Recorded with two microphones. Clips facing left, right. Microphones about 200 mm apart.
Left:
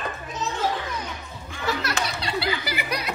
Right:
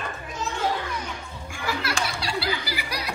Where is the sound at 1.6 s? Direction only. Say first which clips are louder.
Left 1 dB; 20° left (ahead or behind).